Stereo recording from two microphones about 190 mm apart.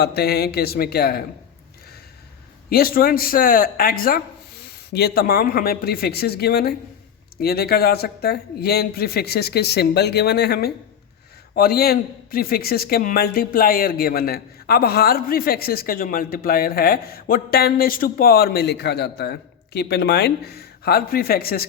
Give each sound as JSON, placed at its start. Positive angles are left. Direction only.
{"t": 0.0, "sound": "speech", "side_deg": 60}
{"t": 2.6, "sound": "a man's voice", "side_deg": 50}